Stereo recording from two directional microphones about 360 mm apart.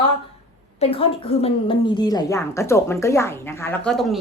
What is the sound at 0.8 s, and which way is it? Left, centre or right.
A woman's voice, centre.